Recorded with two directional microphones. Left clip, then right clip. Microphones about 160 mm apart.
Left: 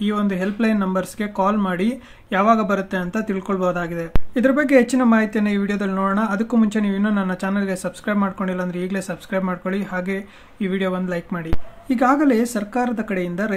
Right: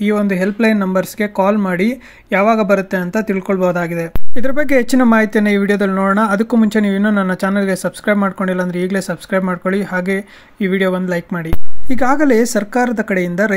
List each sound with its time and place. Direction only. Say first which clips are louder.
0.0 s speech: right 7 dB; 35° right (ahead or behind)
11.9 s speech: right 4 dB; 50° right (ahead or behind)